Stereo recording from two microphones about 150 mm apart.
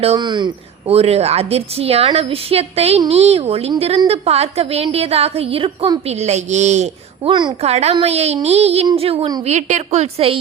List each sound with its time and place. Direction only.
0.2 s a woman's voice: 30° right (ahead or behind); by 6.9 s 50° right (ahead or behind)
7.3 s a woman's voice: 30° right (ahead or behind)
7.6 s a woman's voice: 45° right (ahead or behind)
9.4 s a woman's voice: 50° right (ahead or behind)